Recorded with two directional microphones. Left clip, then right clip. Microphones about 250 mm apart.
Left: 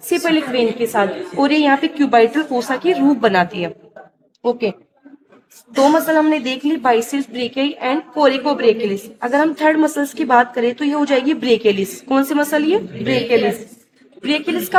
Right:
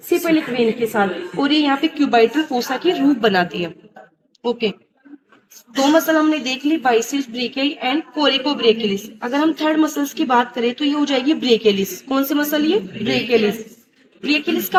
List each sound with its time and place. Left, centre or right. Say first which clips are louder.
0.1 s a woman's voice: left 1 dB; left
5.7 s a woman's voice: left 2 dB; left